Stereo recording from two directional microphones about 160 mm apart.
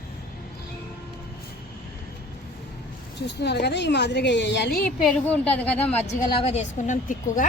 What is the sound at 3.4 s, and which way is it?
A woman's voice, 90° left.